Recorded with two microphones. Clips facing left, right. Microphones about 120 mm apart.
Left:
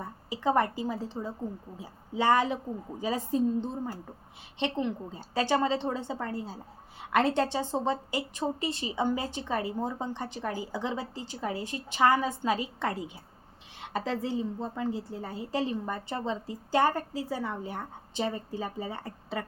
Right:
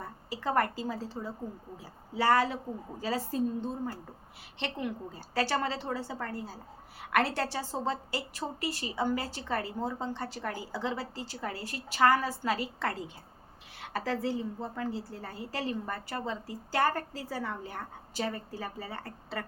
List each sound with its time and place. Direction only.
0.0 s a woman's voice: 15° left (ahead or behind)